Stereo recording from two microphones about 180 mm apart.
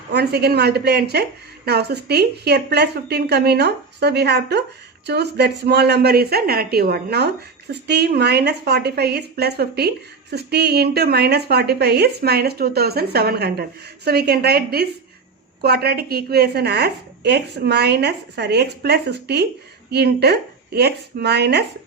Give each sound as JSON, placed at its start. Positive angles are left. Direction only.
{"t": 0.1, "sound": "a woman's voice", "side_deg": -65}